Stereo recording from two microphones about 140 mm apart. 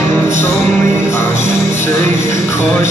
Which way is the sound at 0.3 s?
20° left (ahead or behind).